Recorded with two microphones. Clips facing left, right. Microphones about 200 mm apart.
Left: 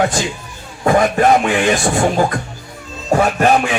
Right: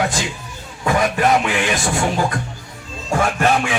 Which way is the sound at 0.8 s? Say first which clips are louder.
Left 5 dB; 40° left (ahead or behind).